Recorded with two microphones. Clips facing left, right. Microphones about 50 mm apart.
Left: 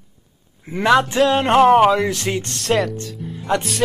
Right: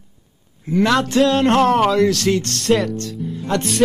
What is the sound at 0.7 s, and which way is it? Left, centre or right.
Speech, left.